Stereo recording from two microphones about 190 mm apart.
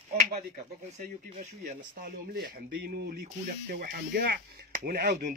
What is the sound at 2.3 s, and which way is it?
Speech, 50° right (ahead or behind).